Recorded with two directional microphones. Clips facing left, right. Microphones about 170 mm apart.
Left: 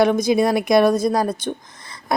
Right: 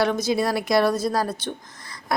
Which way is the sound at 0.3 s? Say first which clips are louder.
Left 5 dB; 20° left (ahead or behind).